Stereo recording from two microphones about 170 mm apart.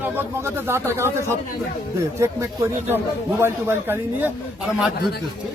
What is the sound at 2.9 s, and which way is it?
Speech, 15° right (ahead or behind).